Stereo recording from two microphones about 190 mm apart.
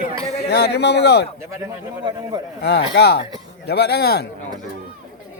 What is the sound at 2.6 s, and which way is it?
Speech, 60° left (ahead or behind).